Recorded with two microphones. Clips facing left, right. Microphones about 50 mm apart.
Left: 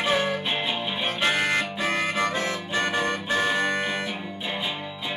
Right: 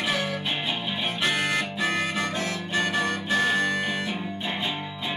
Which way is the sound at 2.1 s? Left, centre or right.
Left.